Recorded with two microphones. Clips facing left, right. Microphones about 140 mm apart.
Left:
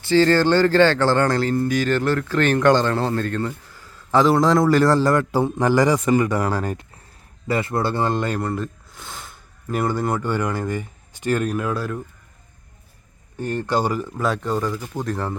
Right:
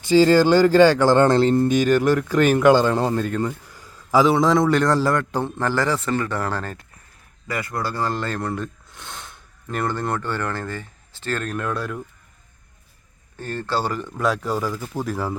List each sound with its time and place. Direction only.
0.0 s speech: 15° right (ahead or behind)
4.2 s a man's voice: centre (ahead or behind)
7.4 s speech: 25° left (ahead or behind)
8.4 s speech: centre (ahead or behind)
13.4 s speech: 15° left (ahead or behind); by 15.4 s 5° right (ahead or behind)